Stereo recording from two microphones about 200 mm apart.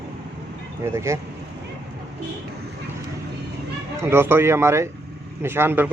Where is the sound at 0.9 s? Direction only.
15° right (ahead or behind).